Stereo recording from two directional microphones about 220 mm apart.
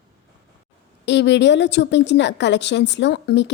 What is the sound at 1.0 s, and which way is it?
A woman's voice, 50° left (ahead or behind).